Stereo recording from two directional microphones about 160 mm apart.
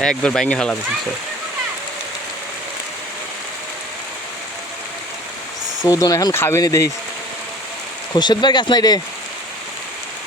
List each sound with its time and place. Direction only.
0.0 s speech: 5° left (ahead or behind)
5.9 s speech: 25° left (ahead or behind)
8.1 s speech: 25° left (ahead or behind)